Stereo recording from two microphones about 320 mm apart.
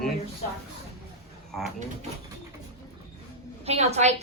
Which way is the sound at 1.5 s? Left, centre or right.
Centre.